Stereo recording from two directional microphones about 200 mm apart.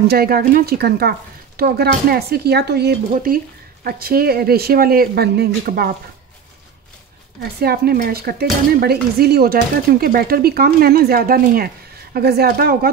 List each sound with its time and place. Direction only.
0.1 s speech: 50° right (ahead or behind)
7.6 s speech: 50° right (ahead or behind)